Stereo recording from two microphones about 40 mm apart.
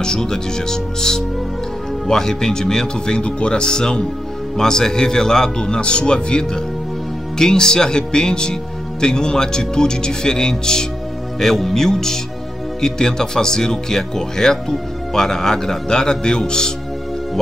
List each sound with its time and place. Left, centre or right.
0.0 s speech: centre
3.2 s speech: left